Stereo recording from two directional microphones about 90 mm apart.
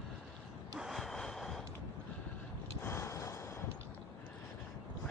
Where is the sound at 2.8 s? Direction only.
30° left (ahead or behind).